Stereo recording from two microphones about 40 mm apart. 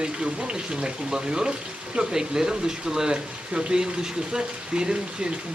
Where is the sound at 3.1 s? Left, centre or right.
Right.